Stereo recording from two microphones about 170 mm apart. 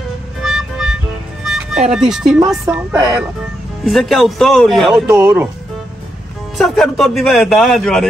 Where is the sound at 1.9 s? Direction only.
5° right (ahead or behind).